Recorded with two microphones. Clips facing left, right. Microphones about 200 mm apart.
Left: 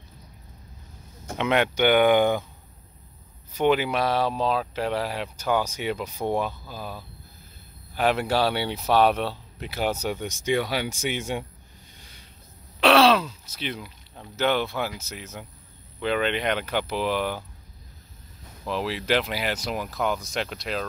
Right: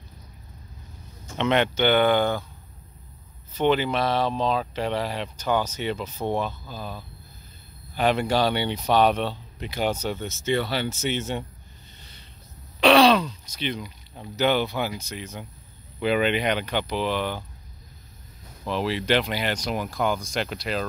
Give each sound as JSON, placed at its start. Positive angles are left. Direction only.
{"t": 1.4, "sound": "speech", "side_deg": 5}
{"t": 3.5, "sound": "speech", "side_deg": 10}
{"t": 12.0, "sound": "a sound", "side_deg": 10}
{"t": 12.8, "sound": "throat clearing", "side_deg": 0}
{"t": 14.2, "sound": "speech", "side_deg": 0}
{"t": 16.0, "sound": "speech", "side_deg": -10}
{"t": 18.7, "sound": "speech", "side_deg": 0}